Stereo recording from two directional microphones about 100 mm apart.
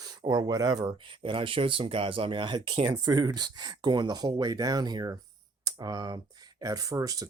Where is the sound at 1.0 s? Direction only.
55° right (ahead or behind).